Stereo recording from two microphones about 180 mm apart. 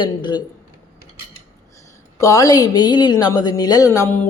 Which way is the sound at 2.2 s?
20° left (ahead or behind).